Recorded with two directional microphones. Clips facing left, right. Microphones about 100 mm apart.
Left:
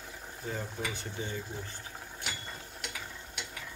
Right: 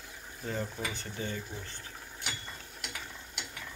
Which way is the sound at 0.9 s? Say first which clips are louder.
Even; 15° left (ahead or behind).